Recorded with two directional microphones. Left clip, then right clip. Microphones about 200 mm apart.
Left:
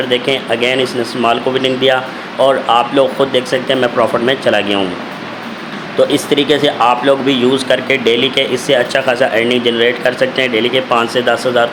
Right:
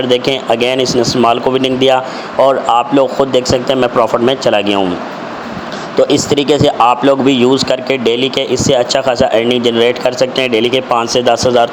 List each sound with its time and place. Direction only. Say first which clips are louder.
0.1 s speech: right 4 dB; 30° right (ahead or behind)
6.0 s speech: right 1 dB; 25° right (ahead or behind)